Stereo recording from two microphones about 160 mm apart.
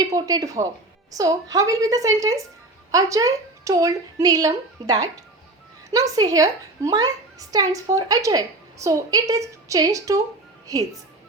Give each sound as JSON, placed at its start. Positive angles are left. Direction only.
{"t": 0.0, "sound": "a woman's voice", "side_deg": -25}